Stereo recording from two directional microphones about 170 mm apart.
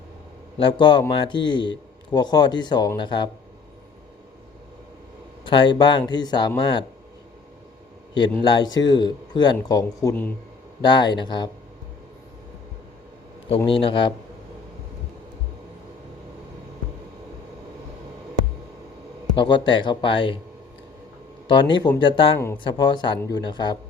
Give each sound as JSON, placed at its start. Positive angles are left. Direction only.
{"t": 0.5, "sound": "speech", "side_deg": 30}
{"t": 5.5, "sound": "speech", "side_deg": 25}
{"t": 8.4, "sound": "speech", "side_deg": 25}
{"t": 10.8, "sound": "speech", "side_deg": 25}
{"t": 13.7, "sound": "a man's voice", "side_deg": 30}
{"t": 19.3, "sound": "speech", "side_deg": 25}
{"t": 21.4, "sound": "speech", "side_deg": 30}